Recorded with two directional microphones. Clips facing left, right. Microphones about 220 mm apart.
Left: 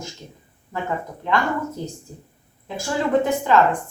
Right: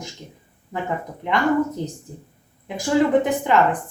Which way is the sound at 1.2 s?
15° right (ahead or behind).